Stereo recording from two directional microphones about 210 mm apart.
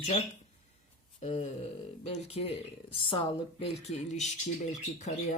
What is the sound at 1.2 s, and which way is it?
Speech, 30° left (ahead or behind).